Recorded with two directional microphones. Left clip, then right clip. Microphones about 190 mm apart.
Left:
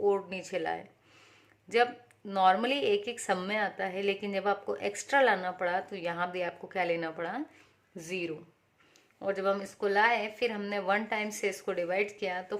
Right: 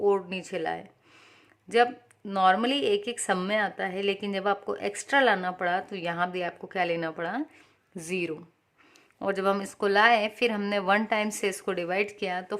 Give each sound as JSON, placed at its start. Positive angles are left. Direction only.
{"t": 0.0, "sound": "speech", "side_deg": -25}